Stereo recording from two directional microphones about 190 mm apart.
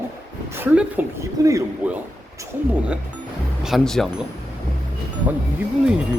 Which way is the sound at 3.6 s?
Centre (ahead or behind).